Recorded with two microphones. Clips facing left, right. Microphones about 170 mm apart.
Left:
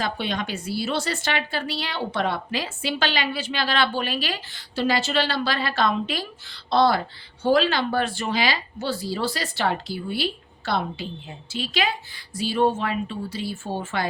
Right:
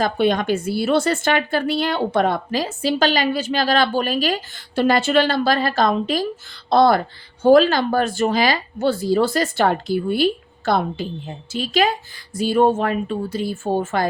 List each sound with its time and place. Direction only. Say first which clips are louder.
0.0 s speech: right 9 dB; 50° right (ahead or behind)